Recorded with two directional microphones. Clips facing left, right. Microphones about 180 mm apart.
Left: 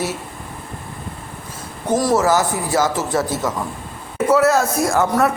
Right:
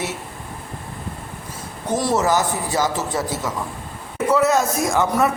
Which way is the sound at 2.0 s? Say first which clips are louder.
Left 3 dB; 20° right (ahead or behind).